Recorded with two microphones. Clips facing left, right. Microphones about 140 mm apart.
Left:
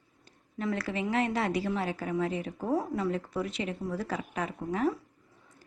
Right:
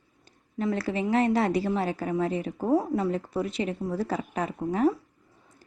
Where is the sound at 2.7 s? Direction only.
25° right (ahead or behind).